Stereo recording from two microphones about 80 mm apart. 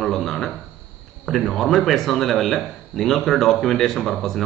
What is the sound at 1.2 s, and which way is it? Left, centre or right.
Speech, centre.